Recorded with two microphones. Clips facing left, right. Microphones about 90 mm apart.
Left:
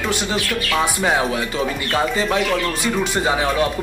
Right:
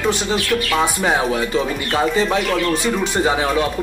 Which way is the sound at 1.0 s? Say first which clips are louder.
Right 1 dB; 30° right (ahead or behind).